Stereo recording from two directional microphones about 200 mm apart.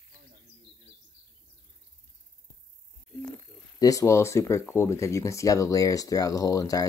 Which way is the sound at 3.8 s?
15° left (ahead or behind).